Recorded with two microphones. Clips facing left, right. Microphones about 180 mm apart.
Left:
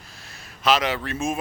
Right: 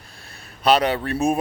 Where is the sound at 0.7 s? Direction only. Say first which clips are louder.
Right 4 dB; 35° right (ahead or behind).